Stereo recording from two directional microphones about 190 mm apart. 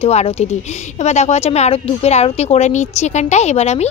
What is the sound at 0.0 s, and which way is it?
A woman's voice, 35° left (ahead or behind).